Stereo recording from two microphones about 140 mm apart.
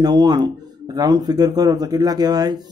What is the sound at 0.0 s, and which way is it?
Speech, 30° right (ahead or behind).